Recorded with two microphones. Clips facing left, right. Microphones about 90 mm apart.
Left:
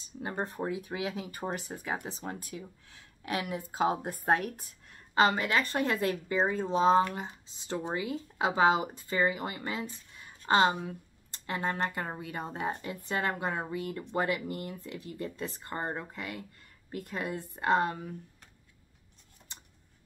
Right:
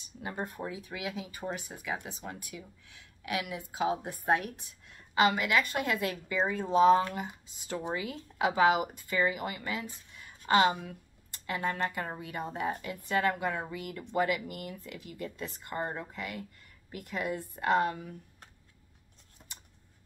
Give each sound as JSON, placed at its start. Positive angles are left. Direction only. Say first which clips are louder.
{"t": 0.0, "sound": "a woman's voice", "louder": "left 2 dB", "side_deg": 30}
{"t": 10.1, "sound": "a sound", "louder": "even", "side_deg": 30}
{"t": 12.2, "sound": "a woman's voice", "louder": "right 1 dB", "side_deg": 30}